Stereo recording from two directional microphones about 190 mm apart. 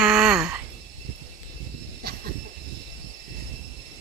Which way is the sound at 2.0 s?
55° right (ahead or behind).